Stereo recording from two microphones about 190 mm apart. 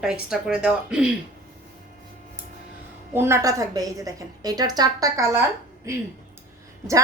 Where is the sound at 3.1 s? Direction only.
15° right (ahead or behind).